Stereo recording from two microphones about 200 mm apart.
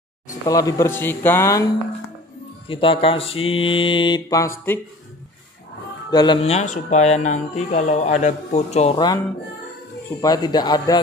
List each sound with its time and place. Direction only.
0.5 s speech: 15° left (ahead or behind)
2.7 s mantra: 25° left (ahead or behind)
6.0 s speech: 20° left (ahead or behind)
10.2 s mantra: 20° left (ahead or behind)